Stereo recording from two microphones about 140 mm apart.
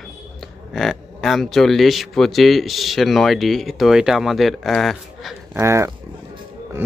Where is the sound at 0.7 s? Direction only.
Centre (ahead or behind).